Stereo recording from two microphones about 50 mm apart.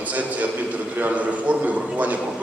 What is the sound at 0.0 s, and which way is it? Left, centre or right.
A man's voice, right.